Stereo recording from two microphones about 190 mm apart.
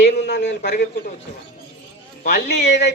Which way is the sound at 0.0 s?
65° left (ahead or behind).